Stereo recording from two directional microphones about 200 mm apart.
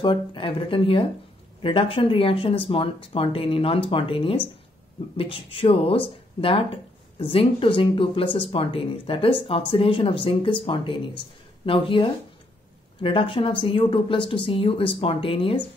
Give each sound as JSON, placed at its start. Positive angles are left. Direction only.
{"t": 0.0, "sound": "speech", "side_deg": 25}